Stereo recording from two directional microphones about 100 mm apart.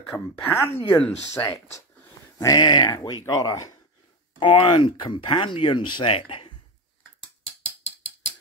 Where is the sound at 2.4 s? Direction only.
40° left (ahead or behind).